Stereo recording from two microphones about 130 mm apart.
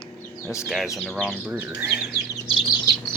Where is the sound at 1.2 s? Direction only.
10° right (ahead or behind).